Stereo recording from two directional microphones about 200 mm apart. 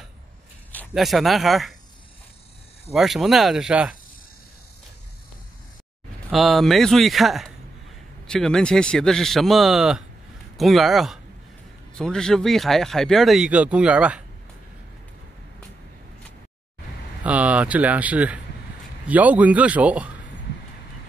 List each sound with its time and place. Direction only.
0.7 s speech: 5° left (ahead or behind)
2.9 s speech: centre (ahead or behind)
6.3 s speech: centre (ahead or behind)
17.2 s speech: 5° right (ahead or behind)